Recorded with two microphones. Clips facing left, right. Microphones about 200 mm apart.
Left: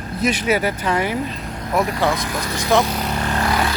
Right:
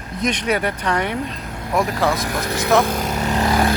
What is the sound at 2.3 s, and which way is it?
Speech, 55° right (ahead or behind).